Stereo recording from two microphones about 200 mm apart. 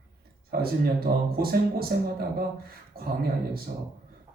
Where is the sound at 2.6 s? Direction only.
50° right (ahead or behind).